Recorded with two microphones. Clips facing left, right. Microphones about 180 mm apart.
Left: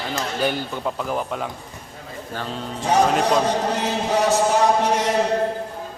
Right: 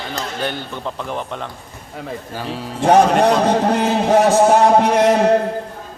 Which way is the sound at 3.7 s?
55° right (ahead or behind).